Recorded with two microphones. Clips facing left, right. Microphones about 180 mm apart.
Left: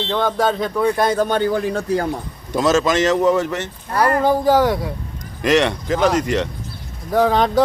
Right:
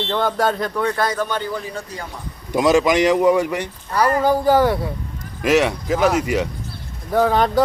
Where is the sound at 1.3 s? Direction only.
60° left (ahead or behind).